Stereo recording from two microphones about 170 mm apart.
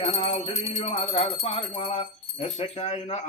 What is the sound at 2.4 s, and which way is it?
Music, 35° left (ahead or behind).